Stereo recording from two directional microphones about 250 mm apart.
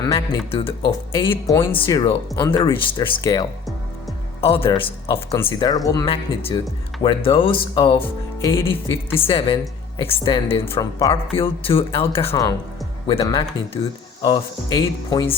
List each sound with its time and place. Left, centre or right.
0.0 s speech: centre